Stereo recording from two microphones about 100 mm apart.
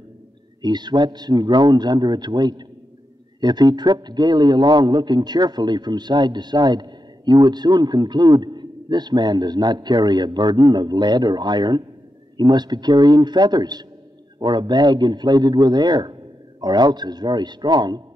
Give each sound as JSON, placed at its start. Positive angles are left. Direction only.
{"t": 0.6, "sound": "a man's voice", "side_deg": -45}